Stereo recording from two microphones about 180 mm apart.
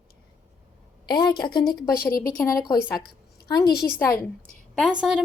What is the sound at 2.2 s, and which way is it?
Speech, 10° left (ahead or behind).